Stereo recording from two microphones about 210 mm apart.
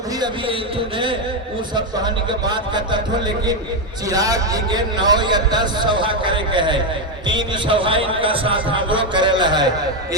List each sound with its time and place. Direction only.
1.7 s a man's voice: 20° right (ahead or behind)
4.1 s a man's voice: 15° right (ahead or behind)